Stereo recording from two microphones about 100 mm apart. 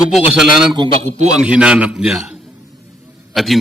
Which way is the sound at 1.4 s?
10° right (ahead or behind).